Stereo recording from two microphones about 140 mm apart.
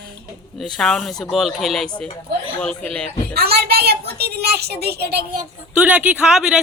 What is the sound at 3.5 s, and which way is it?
Speech, 90° right.